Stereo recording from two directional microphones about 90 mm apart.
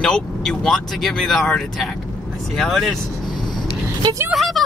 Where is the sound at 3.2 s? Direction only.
50° left (ahead or behind).